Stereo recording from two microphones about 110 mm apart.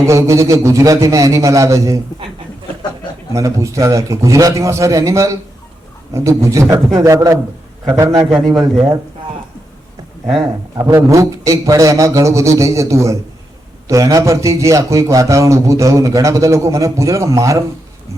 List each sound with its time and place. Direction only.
0.0 s a man's voice: 25° right (ahead or behind)
3.3 s a man's voice: 30° right (ahead or behind)
10.3 s a man's voice: 30° right (ahead or behind)